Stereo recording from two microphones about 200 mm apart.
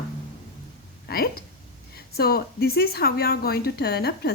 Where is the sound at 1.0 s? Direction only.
50° left (ahead or behind).